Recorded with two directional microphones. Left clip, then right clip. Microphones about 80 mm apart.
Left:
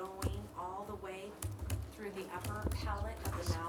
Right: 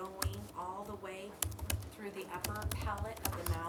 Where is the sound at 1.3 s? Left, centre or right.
Right.